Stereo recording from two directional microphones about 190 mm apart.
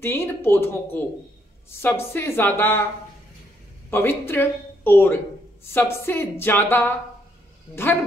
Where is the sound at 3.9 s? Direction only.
10° left (ahead or behind).